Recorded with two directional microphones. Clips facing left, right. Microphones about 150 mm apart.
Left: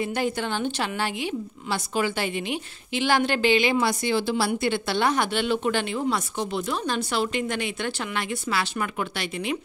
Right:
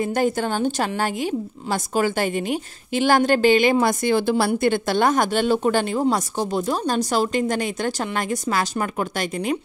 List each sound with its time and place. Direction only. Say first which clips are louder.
0.0 s a woman's voice: right 5 dB; 45° right (ahead or behind)